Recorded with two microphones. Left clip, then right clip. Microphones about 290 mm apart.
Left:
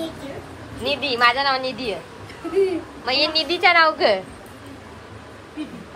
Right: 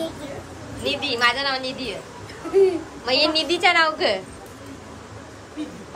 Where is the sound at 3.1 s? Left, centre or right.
Centre.